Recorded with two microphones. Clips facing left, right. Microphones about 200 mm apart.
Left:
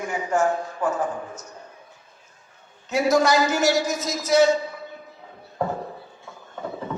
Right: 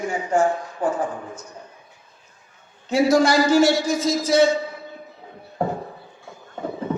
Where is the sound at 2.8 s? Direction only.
30° right (ahead or behind).